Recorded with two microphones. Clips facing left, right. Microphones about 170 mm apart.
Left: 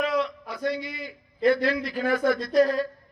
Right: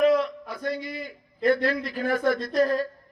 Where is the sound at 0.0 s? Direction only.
50° right (ahead or behind).